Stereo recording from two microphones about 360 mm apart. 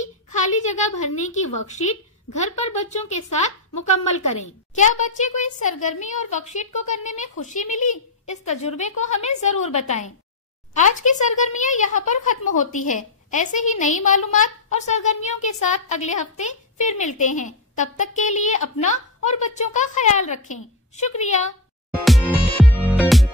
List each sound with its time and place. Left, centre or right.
0.0 s a sound: centre
1.7 s speech: centre
22.0 s music: centre